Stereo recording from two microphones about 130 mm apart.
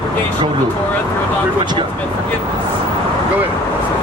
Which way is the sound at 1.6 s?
35° right (ahead or behind).